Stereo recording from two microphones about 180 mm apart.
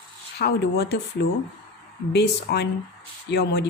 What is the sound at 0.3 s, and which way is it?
Speech, 65° left (ahead or behind).